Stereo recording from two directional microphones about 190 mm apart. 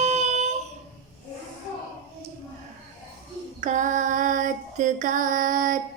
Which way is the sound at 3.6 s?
40° right (ahead or behind).